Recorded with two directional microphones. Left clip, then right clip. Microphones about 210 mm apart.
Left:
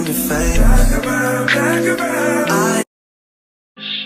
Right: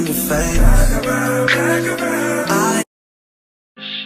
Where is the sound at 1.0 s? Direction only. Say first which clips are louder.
Right 1 dB; 15° right (ahead or behind).